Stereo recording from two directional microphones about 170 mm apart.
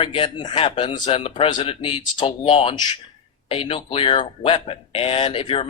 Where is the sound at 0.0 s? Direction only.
30° left (ahead or behind).